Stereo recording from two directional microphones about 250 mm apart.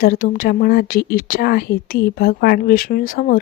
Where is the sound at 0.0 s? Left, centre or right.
Left.